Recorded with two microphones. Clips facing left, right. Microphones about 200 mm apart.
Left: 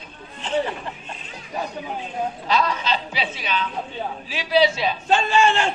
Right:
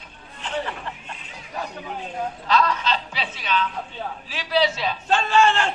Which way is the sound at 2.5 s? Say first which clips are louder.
Right 1 dB; 5° left (ahead or behind).